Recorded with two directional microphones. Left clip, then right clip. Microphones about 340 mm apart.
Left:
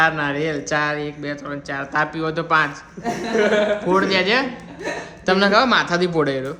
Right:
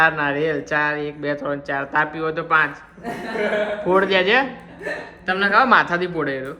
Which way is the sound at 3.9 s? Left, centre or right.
Centre.